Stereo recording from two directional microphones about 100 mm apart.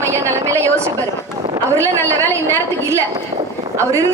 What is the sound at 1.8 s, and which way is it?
Speech, 30° right (ahead or behind).